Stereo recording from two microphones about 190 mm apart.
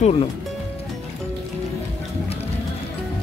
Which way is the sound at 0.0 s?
30° left (ahead or behind).